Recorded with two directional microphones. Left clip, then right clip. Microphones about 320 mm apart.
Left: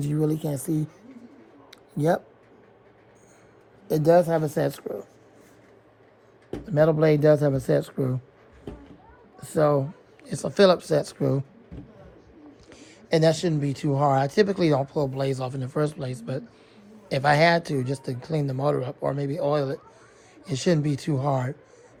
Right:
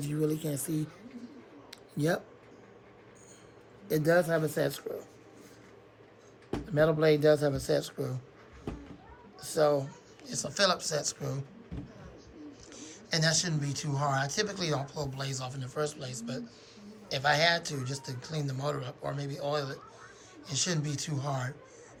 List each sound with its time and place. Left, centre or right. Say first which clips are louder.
0.0 s speech: left 6 dB; centre
3.8 s speech: left 7 dB; centre
6.7 s speech: left 5 dB; centre
10.2 s speech: left 9 dB; centre
12.7 s speech: left 10 dB; centre